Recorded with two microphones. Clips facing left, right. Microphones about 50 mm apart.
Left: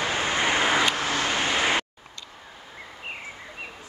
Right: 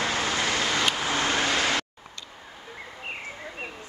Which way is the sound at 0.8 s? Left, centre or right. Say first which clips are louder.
Left 1 dB; centre.